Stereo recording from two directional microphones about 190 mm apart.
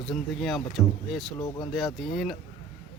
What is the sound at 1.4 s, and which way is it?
Speech, 20° left (ahead or behind).